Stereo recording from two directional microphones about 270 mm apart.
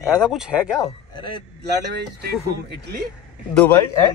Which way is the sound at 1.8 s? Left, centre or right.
Right.